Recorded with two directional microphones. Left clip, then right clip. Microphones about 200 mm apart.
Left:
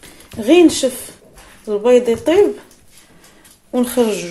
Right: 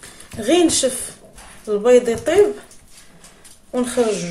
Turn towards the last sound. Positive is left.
turn(degrees=30)  # may be behind; listen again after turning